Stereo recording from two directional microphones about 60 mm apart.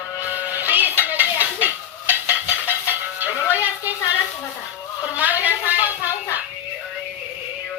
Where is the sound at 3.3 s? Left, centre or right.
Left.